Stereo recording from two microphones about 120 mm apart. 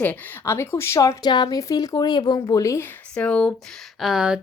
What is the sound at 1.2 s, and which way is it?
A woman's voice, 35° left (ahead or behind).